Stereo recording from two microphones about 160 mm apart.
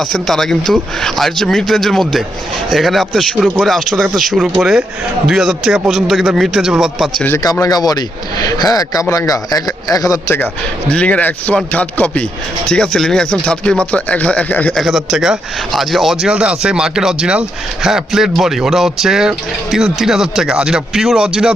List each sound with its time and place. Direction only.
0.0 s speech: centre (ahead or behind)
7.3 s speech: 15° left (ahead or behind); by 21.5 s 5° right (ahead or behind)